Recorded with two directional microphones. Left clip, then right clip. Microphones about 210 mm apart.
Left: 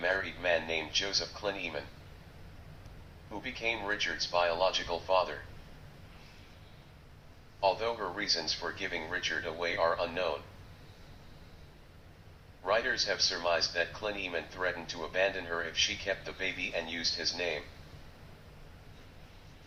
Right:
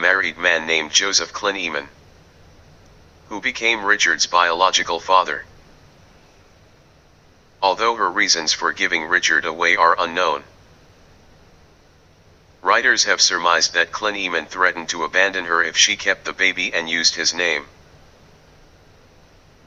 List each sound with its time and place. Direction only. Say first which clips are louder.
0.0 s speech: right 15 dB; 55° right (ahead or behind)
3.3 s speech: right 15 dB; 55° right (ahead or behind)
7.6 s speech: right 13 dB; 55° right (ahead or behind)
12.6 s speech: right 15 dB; 55° right (ahead or behind)